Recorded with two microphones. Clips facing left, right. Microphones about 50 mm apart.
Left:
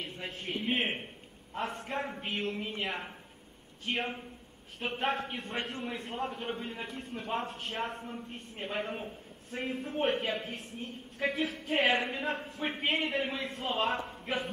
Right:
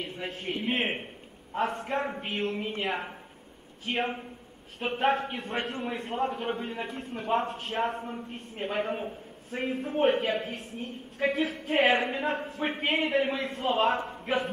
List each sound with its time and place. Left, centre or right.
0.0 s a man's voice: centre
6.5 s a man's voice: right
6.9 s a man's voice: centre
8.0 s a man's voice: centre
14.1 s a sound: centre